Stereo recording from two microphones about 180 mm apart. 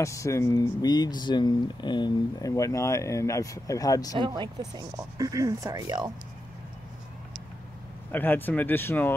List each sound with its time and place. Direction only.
0.0 s speech: 15° left (ahead or behind)
4.2 s speech: 25° right (ahead or behind)
8.1 s speech: 10° left (ahead or behind)